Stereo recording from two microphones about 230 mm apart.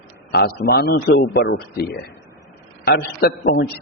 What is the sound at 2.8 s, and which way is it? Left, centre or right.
Speech, left.